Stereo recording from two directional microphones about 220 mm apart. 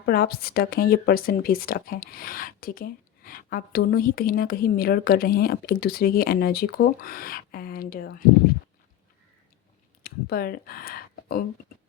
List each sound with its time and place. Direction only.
0.0 s speech: 45° left (ahead or behind)
10.0 s speech: 45° left (ahead or behind)